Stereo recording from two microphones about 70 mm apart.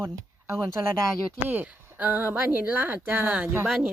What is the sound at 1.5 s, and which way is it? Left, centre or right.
Speech, right.